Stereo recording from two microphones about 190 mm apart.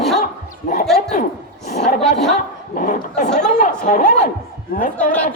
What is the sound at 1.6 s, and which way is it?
A man's voice, 40° left (ahead or behind).